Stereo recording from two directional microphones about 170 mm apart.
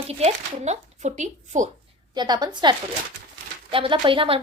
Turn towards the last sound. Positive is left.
turn(degrees=-30)  # may be behind; listen again after turning